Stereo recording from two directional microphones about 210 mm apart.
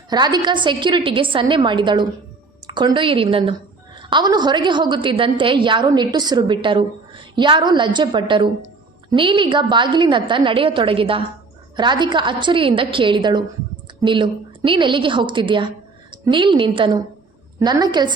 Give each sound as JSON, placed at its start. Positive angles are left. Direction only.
{"t": 0.1, "sound": "a woman's voice", "side_deg": -20}